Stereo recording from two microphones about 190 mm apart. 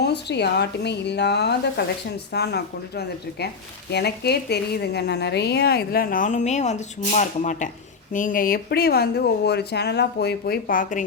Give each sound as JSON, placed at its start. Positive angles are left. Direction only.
{"t": 0.0, "sound": "a woman's voice", "side_deg": 60}